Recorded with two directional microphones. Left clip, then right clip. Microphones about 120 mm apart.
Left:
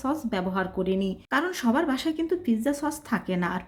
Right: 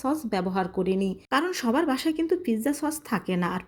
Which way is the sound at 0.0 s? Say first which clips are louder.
Right 1 dB; 30° right (ahead or behind).